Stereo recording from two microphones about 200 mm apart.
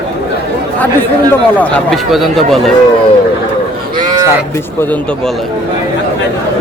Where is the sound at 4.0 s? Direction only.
15° right (ahead or behind).